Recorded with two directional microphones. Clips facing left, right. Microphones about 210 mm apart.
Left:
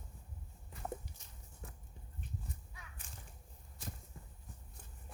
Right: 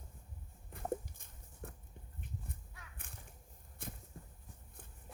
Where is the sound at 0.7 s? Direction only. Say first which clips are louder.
Right 5 dB; 50° right (ahead or behind).